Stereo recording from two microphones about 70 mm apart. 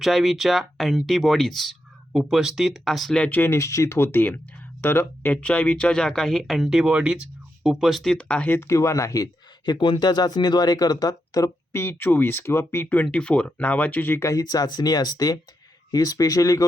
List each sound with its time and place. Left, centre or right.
0.0 s speech: centre
2.1 s speech: centre
3.2 s speech: left
3.5 s speech: left
5.3 s speech: centre
6.8 s speech: centre
8.1 s speech: centre
8.6 s speech: left
9.6 s speech: left
11.7 s speech: left
12.9 s speech: centre
14.2 s speech: left
14.4 s speech: left